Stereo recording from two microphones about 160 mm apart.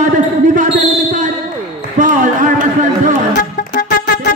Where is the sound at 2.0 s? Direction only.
50° right (ahead or behind).